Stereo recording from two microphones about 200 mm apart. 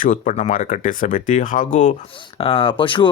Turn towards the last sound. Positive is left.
turn(degrees=25)  # may be behind; listen again after turning